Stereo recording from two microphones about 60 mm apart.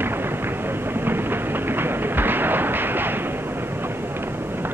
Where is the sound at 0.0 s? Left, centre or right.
Right.